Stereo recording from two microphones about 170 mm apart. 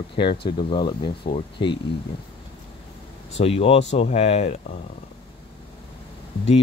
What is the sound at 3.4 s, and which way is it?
Speech, 35° left (ahead or behind).